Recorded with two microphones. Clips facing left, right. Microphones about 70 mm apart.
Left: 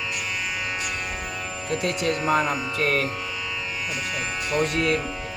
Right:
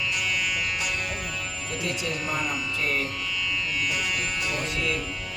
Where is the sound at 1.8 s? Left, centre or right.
Left.